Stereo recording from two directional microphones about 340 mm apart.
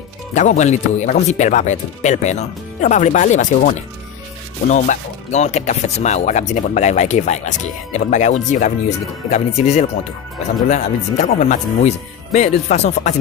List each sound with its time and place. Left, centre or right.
0.3 s speech: left